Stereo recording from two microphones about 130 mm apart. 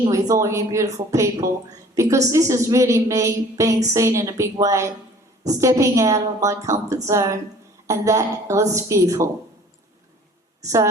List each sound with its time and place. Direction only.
0.1 s a woman's voice: 25° right (ahead or behind)
10.6 s a woman's voice: 25° right (ahead or behind)